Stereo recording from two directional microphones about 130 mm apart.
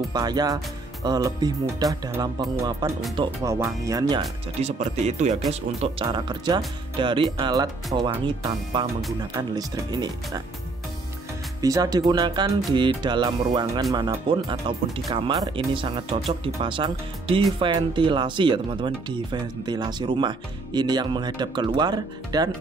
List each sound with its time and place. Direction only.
0.1 s speech: 30° right (ahead or behind)
4.6 s speech: 60° right (ahead or behind)
6.0 s speech: 35° right (ahead or behind)
9.3 s speech: 30° right (ahead or behind)
11.6 s speech: 30° right (ahead or behind)